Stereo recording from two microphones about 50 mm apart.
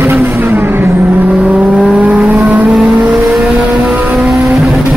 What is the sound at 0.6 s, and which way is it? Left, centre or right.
Vehicle, right.